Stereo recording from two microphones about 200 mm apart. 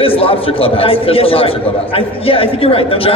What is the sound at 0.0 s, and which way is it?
A man's voice, 30° left (ahead or behind).